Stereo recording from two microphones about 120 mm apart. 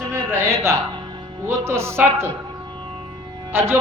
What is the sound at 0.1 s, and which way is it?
A woman's voice, 20° right (ahead or behind).